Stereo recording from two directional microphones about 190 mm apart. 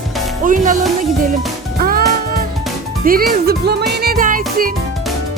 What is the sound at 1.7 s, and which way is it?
Music, 50° right (ahead or behind).